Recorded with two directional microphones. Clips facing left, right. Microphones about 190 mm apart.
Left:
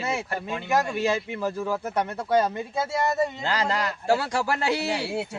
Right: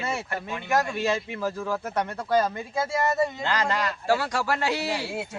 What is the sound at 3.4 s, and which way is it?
A man's voice, 35° left (ahead or behind).